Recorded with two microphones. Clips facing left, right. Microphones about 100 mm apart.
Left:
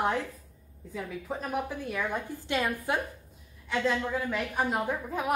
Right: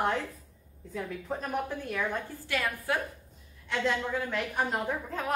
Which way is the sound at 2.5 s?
20° left (ahead or behind).